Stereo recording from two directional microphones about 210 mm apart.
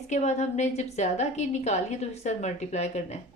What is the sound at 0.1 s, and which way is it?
A woman's voice, 35° left (ahead or behind).